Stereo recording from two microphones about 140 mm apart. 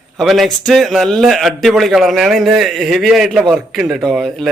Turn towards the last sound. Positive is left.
turn(degrees=-5)  # may be behind; listen again after turning